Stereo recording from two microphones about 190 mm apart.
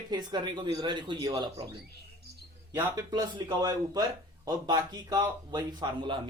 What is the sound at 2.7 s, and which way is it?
Speech, 20° right (ahead or behind).